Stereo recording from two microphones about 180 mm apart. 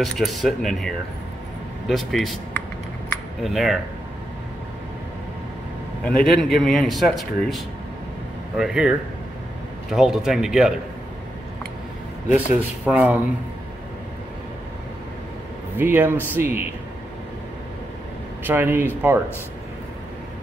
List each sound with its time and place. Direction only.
0.0 s speech: centre (ahead or behind)
6.0 s speech: 5° left (ahead or behind)
12.3 s speech: 10° right (ahead or behind)
15.8 s speech: 10° right (ahead or behind)
18.4 s speech: 10° right (ahead or behind)